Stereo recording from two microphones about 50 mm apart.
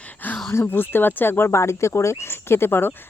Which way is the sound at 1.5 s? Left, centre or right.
Left.